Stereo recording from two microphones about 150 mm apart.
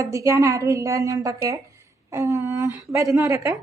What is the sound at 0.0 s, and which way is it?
A woman's voice, 20° right (ahead or behind).